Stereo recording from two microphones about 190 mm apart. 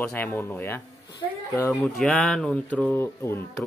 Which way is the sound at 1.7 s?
Centre (ahead or behind).